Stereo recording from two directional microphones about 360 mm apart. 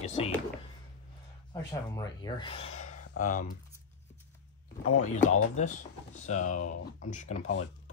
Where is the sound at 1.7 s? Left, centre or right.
Centre.